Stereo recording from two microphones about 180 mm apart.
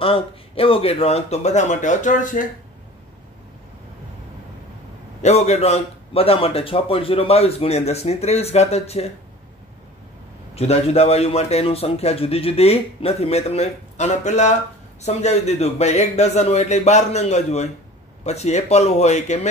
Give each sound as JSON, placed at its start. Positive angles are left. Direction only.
{"t": 0.0, "sound": "speech", "side_deg": 30}
{"t": 5.2, "sound": "speech", "side_deg": 40}
{"t": 10.5, "sound": "speech", "side_deg": 35}